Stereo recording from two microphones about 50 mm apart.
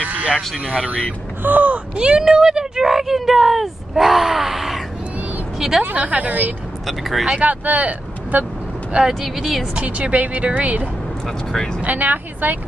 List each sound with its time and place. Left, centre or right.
0.0 s a sound: right
0.7 s speech: right
2.0 s speech: centre
5.9 s speech: right
6.9 s speech: centre
7.2 s speech: right
9.2 s speech: centre
9.8 s speech: right
11.2 s speech: centre
11.8 s speech: right